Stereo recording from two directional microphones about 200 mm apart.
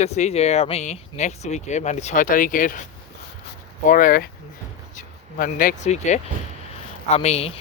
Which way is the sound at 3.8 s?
40° left (ahead or behind).